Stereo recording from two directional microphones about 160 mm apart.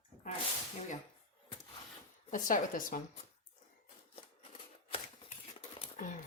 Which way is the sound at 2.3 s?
55° left (ahead or behind).